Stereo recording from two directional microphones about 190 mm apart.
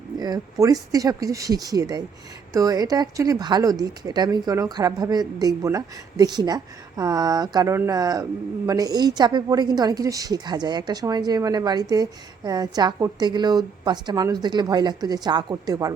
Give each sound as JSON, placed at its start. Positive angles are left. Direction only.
{"t": 0.2, "sound": "speech", "side_deg": -20}